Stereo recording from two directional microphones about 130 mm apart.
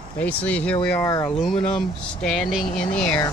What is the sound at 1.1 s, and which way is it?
Speech, 25° left (ahead or behind).